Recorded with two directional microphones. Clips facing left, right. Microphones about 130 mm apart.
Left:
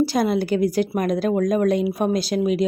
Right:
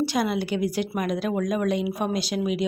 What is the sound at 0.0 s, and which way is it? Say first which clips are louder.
Speech: left 5 dB; 40° left (ahead or behind).